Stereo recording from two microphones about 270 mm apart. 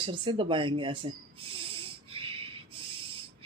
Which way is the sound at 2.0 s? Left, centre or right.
Centre.